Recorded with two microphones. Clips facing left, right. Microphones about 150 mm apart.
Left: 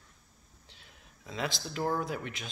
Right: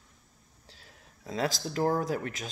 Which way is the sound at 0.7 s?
35° right (ahead or behind).